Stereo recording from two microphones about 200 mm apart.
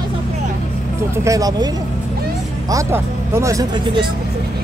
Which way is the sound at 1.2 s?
15° right (ahead or behind).